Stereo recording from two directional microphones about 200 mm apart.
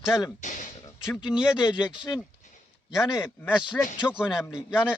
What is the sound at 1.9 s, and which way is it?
Speech, 20° left (ahead or behind).